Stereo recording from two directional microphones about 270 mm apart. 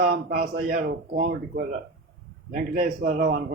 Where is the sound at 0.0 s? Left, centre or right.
Right.